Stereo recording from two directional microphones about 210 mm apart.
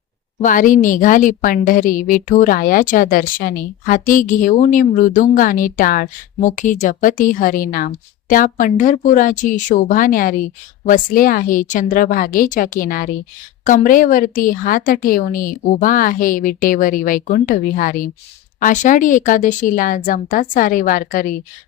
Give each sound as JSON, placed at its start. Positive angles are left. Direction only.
{"t": 0.4, "sound": "a woman's voice", "side_deg": 40}